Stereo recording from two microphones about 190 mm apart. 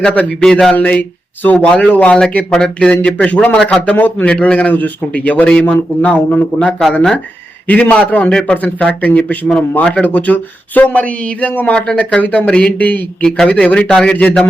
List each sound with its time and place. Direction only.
0.0 s a man's voice: 5° left (ahead or behind)